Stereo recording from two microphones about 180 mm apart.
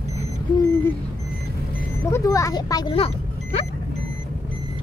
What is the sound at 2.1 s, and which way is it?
Speech, 15° left (ahead or behind).